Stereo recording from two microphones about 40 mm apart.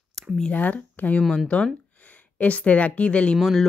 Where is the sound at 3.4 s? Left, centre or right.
Centre.